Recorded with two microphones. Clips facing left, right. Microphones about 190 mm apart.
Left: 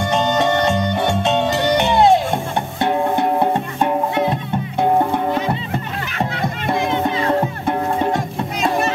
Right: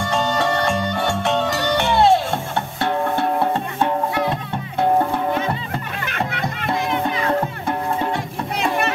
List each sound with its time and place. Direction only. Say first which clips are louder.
0.0 s music: left 3 dB; 20° left (ahead or behind)
6.6 s music: left 3 dB; 25° left (ahead or behind)